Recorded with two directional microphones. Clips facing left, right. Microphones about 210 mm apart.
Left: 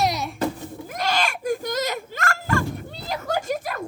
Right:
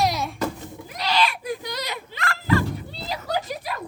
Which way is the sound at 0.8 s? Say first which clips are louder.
Right 1 dB; 50° left (ahead or behind).